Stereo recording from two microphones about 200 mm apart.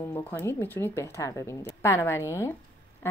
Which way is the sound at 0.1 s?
10° left (ahead or behind).